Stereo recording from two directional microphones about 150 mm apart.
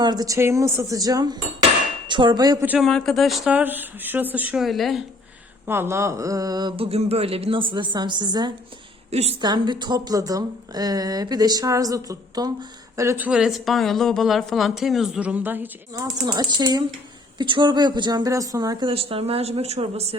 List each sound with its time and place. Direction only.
0.0 s speech: 25° right (ahead or behind)
2.8 s a woman's voice: centre (ahead or behind)
5.6 s speech: 15° right (ahead or behind)
6.7 s a woman's voice: 40° right (ahead or behind)
9.0 s a woman's voice: 45° right (ahead or behind)
9.4 s a woman's voice: 30° right (ahead or behind); by 16.0 s 15° right (ahead or behind)
16.2 s speech: 25° right (ahead or behind)
18.9 s speech: 40° right (ahead or behind)